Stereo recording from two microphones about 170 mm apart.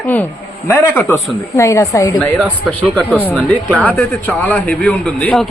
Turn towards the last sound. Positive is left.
turn(degrees=5)  # may be behind; listen again after turning